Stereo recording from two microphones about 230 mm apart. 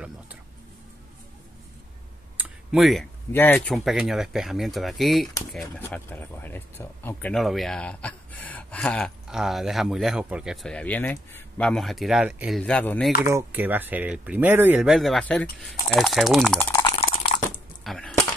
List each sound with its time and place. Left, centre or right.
2.3 s speech: centre
13.2 s speech: centre
16.8 s a sound: left
17.8 s speech: centre